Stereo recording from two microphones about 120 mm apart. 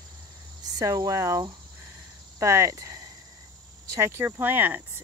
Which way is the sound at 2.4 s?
25° right (ahead or behind).